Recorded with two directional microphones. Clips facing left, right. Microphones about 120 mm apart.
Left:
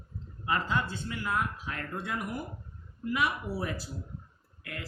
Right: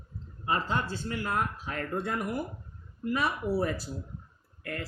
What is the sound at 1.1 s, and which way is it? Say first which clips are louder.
Speech: right 4 dB; 45° right (ahead or behind).